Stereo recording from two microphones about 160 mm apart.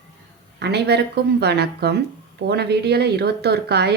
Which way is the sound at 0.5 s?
90° right.